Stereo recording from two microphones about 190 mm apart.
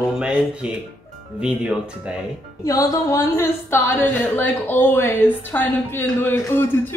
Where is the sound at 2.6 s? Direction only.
20° left (ahead or behind).